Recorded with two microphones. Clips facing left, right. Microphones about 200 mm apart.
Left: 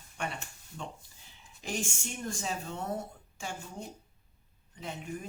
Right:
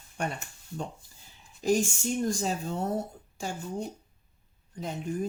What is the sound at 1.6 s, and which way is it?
Speech, 40° right (ahead or behind).